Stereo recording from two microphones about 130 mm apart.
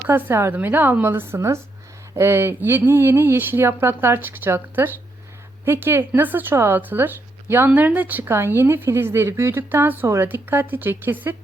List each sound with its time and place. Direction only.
0.1 s speech: 20° right (ahead or behind)